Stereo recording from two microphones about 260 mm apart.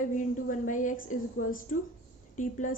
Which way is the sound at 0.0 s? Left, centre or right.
Left.